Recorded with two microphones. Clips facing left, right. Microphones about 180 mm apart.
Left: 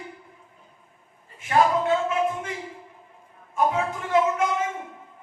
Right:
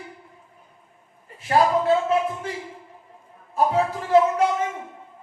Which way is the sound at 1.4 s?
35° right (ahead or behind).